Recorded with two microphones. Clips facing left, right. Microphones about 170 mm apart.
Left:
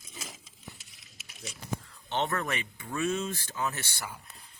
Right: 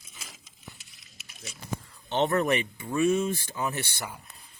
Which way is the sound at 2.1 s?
20° right (ahead or behind).